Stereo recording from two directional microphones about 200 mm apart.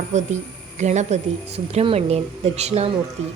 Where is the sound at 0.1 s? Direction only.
35° right (ahead or behind).